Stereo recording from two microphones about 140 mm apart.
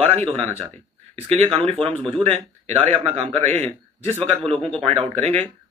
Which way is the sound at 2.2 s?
45° right (ahead or behind).